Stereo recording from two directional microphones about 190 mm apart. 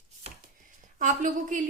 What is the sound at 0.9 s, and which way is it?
Speech, 40° right (ahead or behind).